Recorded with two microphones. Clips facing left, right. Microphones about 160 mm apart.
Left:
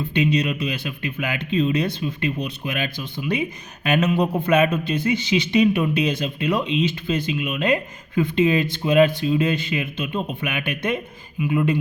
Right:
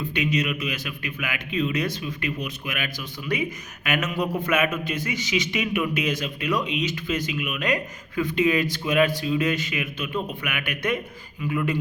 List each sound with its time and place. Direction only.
0.0 s a man's voice: 30° left (ahead or behind)